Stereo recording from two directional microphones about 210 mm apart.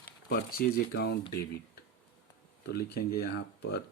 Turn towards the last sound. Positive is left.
turn(degrees=55)  # may be behind; listen again after turning